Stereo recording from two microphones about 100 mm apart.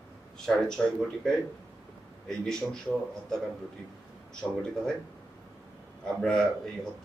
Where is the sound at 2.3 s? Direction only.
5° left (ahead or behind).